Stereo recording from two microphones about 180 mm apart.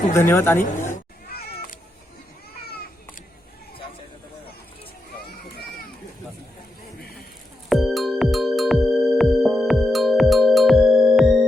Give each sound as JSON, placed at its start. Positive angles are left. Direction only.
{"t": 0.1, "sound": "speech", "side_deg": 15}
{"t": 2.6, "sound": "children playing", "side_deg": 60}
{"t": 5.2, "sound": "children playing", "side_deg": 60}
{"t": 7.7, "sound": "music", "side_deg": 0}